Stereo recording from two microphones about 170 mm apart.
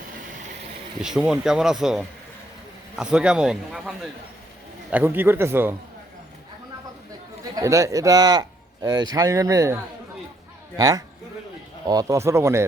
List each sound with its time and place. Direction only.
1.0 s a man's voice: 5° right (ahead or behind)
7.5 s a man's voice: 20° right (ahead or behind)